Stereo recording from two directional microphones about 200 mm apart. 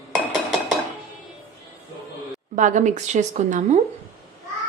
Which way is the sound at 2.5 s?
40° right (ahead or behind).